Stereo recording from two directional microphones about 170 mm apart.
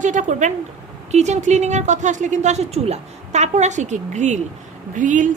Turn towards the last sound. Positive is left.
turn(degrees=-50)  # may be behind; listen again after turning